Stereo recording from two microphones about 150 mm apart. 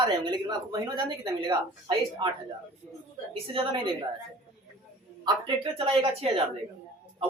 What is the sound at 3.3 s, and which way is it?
Speech, 40° right (ahead or behind).